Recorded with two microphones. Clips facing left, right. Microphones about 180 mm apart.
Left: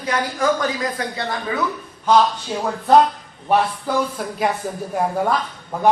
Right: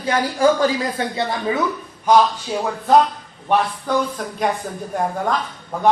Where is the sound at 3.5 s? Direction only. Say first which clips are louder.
Even; 5° left (ahead or behind).